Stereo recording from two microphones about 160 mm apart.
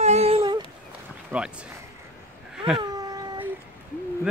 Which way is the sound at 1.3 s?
10° right (ahead or behind).